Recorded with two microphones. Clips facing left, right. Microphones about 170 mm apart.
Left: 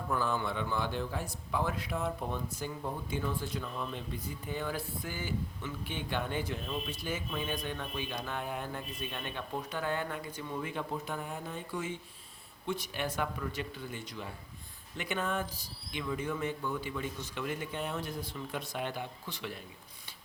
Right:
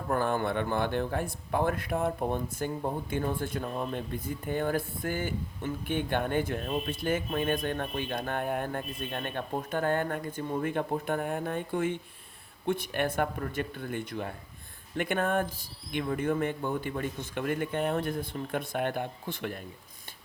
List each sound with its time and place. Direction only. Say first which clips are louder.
0.1 s a man's voice: right 5 dB; 55° right (ahead or behind)